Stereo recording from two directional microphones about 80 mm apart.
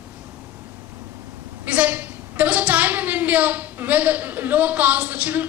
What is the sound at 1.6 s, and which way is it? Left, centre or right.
A woman's voice, centre.